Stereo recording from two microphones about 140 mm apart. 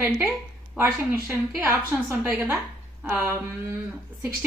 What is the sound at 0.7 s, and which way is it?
A woman's voice, 15° right (ahead or behind).